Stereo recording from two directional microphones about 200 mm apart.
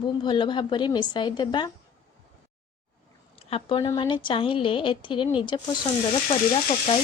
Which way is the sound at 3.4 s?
30° left (ahead or behind).